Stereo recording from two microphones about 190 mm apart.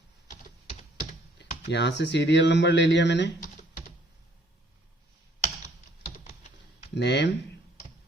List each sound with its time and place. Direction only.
1.4 s speech: 65° left (ahead or behind)
3.4 s typing: 40° left (ahead or behind)
6.2 s typing: 35° left (ahead or behind)
6.9 s speech: 65° left (ahead or behind)